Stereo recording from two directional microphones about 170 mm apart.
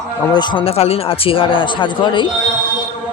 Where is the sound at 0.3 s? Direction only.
25° left (ahead or behind).